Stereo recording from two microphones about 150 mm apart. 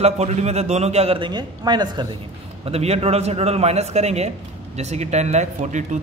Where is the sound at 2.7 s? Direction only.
45° right (ahead or behind).